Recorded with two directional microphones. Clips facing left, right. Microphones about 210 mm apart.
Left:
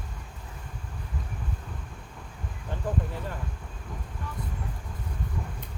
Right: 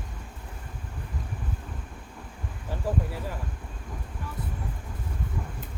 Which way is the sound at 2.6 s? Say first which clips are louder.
Right 1 dB; 5° right (ahead or behind).